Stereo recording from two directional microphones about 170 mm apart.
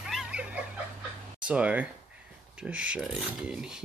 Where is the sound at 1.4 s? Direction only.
5° right (ahead or behind).